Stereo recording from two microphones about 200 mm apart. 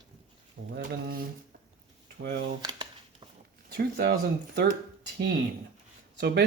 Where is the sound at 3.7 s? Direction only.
55° right (ahead or behind).